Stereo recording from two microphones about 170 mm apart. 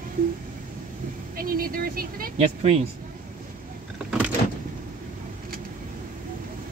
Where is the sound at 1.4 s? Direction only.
55° right (ahead or behind).